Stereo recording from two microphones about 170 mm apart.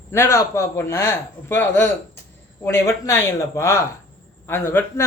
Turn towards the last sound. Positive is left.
turn(degrees=15)  # may be behind; listen again after turning